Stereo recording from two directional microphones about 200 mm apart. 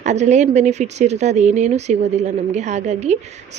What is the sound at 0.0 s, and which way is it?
Speech, 35° right (ahead or behind).